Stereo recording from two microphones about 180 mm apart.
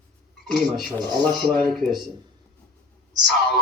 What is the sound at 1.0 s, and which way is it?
Speech, 10° left (ahead or behind).